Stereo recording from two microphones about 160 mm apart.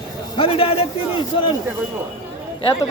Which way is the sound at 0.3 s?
35° left (ahead or behind).